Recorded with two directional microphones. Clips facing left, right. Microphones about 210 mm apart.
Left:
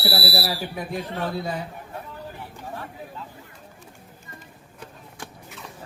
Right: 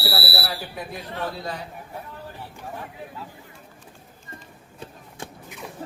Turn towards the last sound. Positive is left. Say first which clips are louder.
# right 2 dB
turn(degrees=-25)  # may be behind; listen again after turning